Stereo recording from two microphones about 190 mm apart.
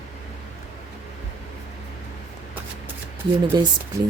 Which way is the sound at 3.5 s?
20° right (ahead or behind).